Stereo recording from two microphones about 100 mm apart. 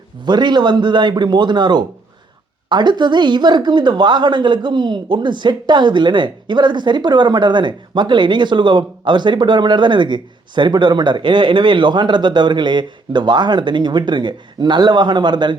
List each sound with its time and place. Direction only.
0.3 s speech: 45° right (ahead or behind)